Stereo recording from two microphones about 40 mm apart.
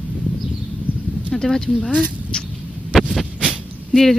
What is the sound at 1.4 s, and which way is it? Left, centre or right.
Speech, centre.